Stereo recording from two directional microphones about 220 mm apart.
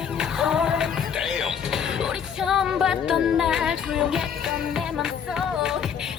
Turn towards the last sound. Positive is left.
turn(degrees=0)  # may be behind; listen again after turning